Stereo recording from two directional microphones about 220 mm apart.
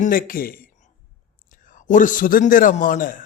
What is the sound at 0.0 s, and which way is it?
A man's voice, 40° left (ahead or behind).